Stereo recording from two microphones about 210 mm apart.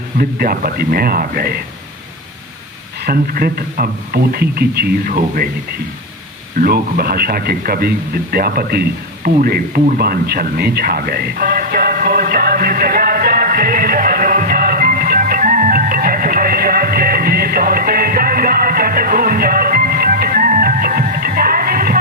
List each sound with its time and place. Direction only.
0.2 s speech: 45° right (ahead or behind)
3.0 s speech: 45° right (ahead or behind)
6.6 s speech: 45° right (ahead or behind)
9.2 s a sound: 45° right (ahead or behind)